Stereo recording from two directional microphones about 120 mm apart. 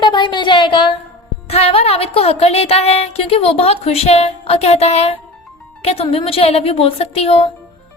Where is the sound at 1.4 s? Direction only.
55° left (ahead or behind).